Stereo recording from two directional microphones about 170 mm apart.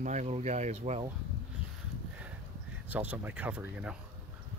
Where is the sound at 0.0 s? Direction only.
45° right (ahead or behind).